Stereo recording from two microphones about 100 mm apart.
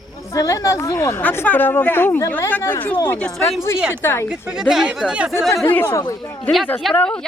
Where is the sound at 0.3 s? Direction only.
35° left (ahead or behind).